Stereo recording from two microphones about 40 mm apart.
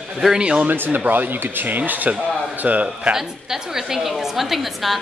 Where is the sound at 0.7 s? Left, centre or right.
Right.